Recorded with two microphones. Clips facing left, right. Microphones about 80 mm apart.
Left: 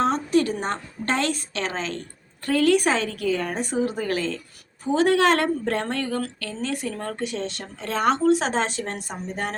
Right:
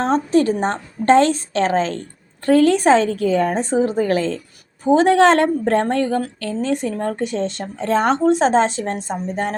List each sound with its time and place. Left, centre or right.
0.0 s a woman's voice: right
8.2 s a woman's voice: right